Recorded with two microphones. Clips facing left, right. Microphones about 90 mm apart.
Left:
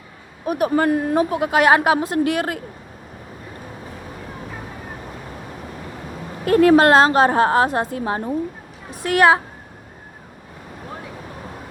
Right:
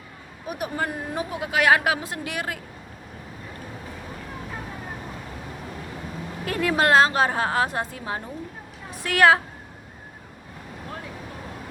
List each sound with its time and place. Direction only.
0.4 s speech: 55° left (ahead or behind)
1.5 s a woman's voice: 35° left (ahead or behind)
2.0 s a woman's voice: 45° left (ahead or behind)
6.4 s a woman's voice: 45° left (ahead or behind)
9.1 s a woman's voice: 20° left (ahead or behind)